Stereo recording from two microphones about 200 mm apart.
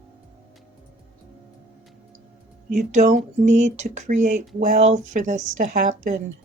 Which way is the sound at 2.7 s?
35° right (ahead or behind).